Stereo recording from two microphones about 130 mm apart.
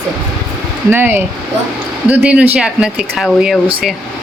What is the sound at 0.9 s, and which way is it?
Speech, 15° right (ahead or behind).